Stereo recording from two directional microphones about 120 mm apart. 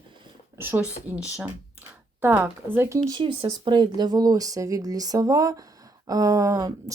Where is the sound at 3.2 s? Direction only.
40° right (ahead or behind).